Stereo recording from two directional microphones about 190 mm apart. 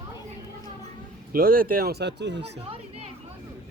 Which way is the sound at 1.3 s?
50° right (ahead or behind).